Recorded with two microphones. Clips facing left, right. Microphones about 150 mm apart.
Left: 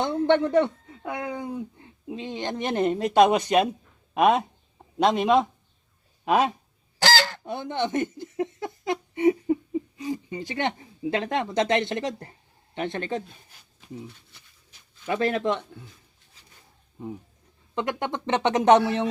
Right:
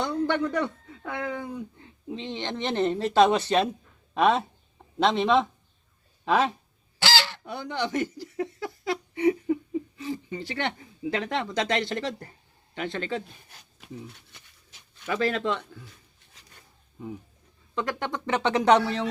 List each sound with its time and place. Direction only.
0.0 s speech: 25° left (ahead or behind)
2.2 s speech: 45° left (ahead or behind)
2.7 s speech: 15° left (ahead or behind)
7.0 s goose: 45° left (ahead or behind)
7.4 s a sound: 20° left (ahead or behind)
10.0 s speech: 15° left (ahead or behind)
14.3 s dog: 75° right (ahead or behind)
15.0 s speech: 20° left (ahead or behind)
17.7 s speech: 20° left (ahead or behind)